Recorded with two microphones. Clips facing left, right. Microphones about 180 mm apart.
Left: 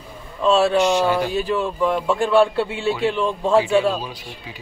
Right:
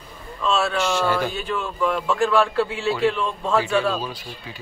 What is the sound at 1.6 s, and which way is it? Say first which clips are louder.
A man's voice: left 3 dB; 25° left (ahead or behind).